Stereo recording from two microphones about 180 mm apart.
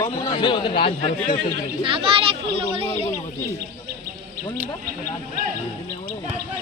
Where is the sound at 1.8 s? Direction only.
30° right (ahead or behind).